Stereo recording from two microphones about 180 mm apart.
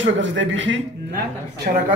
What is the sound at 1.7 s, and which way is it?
Speech, 45° right (ahead or behind).